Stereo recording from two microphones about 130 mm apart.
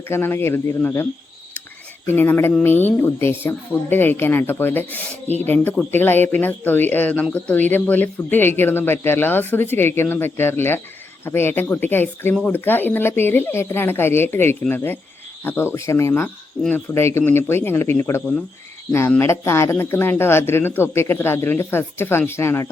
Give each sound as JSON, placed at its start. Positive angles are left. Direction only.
{"t": 0.1, "sound": "speech", "side_deg": 15}
{"t": 2.0, "sound": "speech", "side_deg": 15}